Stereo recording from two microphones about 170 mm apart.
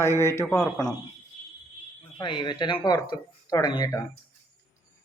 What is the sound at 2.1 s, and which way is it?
Speech, 30° left (ahead or behind).